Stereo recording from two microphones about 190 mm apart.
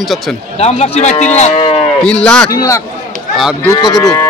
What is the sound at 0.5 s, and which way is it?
Speech, 35° left (ahead or behind).